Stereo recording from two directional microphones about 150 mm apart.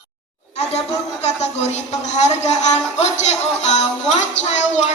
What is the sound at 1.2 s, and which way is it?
Speech, 45° left (ahead or behind).